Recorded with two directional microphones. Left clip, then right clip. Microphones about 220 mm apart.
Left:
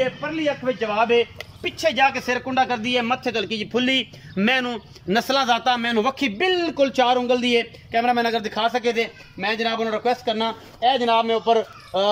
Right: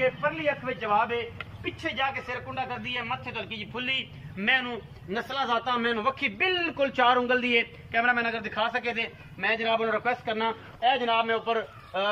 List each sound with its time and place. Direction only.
0.2 s a man's voice: 30° left (ahead or behind)